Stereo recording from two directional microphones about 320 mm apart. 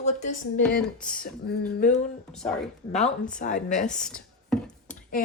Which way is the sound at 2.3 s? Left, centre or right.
Centre.